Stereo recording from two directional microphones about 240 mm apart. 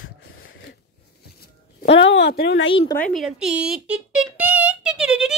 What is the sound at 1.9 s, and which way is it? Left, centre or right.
Speech, left.